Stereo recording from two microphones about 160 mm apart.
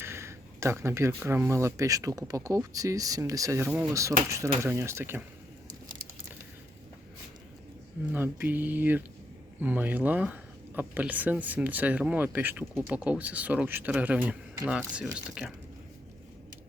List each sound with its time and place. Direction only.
0.0 s speech: 15° right (ahead or behind)
8.1 s speech: 10° right (ahead or behind)